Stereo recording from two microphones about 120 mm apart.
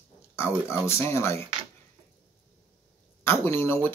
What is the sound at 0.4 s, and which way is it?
Speech, 20° left (ahead or behind).